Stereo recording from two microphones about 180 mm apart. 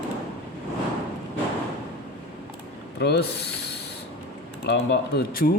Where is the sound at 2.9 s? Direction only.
65° left (ahead or behind).